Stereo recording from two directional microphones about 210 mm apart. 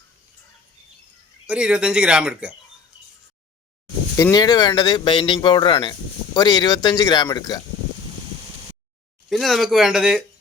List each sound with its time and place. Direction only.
1.5 s speech: 5° right (ahead or behind)
4.2 s speech: 20° left (ahead or behind)
9.3 s speech: centre (ahead or behind)